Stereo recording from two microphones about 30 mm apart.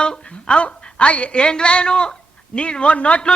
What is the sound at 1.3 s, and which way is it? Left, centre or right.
A man's voice, left.